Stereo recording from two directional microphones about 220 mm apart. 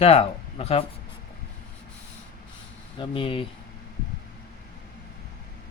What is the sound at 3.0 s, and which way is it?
Speech, 25° left (ahead or behind).